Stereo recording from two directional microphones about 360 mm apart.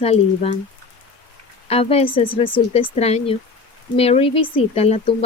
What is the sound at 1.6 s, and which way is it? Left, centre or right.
Speech, centre.